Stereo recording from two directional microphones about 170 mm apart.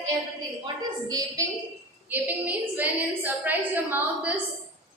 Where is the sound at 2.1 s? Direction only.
10° right (ahead or behind).